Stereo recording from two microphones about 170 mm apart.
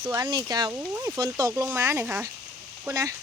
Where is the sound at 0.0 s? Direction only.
20° right (ahead or behind).